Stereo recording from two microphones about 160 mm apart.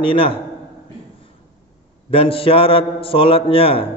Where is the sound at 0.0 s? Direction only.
35° left (ahead or behind).